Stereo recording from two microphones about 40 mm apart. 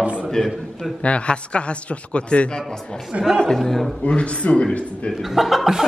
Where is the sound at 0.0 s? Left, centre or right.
Right.